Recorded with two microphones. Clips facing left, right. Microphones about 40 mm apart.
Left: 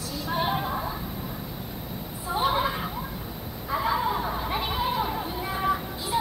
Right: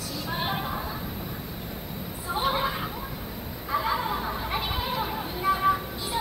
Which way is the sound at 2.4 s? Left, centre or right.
Centre.